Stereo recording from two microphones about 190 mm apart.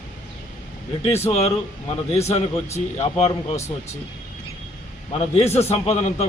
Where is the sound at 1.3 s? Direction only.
35° left (ahead or behind).